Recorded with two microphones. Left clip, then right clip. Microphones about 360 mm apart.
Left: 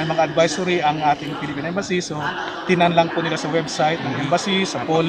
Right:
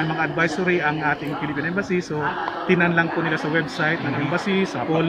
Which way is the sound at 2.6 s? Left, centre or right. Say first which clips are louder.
Left 4 dB; centre.